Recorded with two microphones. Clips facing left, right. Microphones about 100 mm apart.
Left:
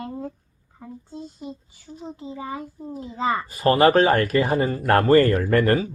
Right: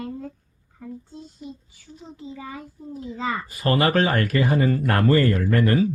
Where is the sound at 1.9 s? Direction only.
40° left (ahead or behind).